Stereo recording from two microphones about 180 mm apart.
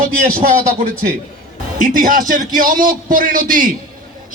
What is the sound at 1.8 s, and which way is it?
A man's voice, 50° right (ahead or behind).